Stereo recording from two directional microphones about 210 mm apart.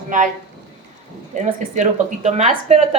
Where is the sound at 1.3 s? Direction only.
35° right (ahead or behind).